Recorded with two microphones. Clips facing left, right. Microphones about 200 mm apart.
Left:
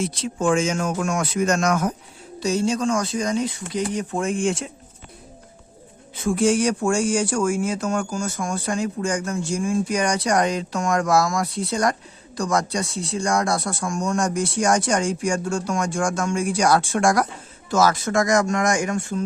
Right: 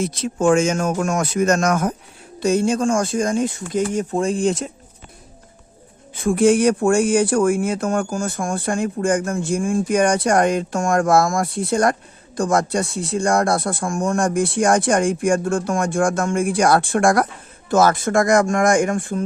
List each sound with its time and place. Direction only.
0.0 s speech: 45° right (ahead or behind)
6.1 s speech: 55° right (ahead or behind)